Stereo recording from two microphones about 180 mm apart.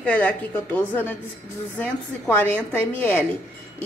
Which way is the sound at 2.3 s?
10° left (ahead or behind).